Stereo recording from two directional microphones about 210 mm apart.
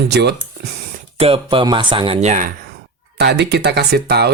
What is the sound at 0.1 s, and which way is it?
Speech, 55° right (ahead or behind).